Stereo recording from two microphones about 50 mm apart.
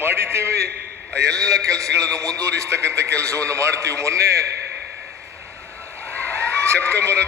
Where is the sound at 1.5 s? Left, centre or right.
Right.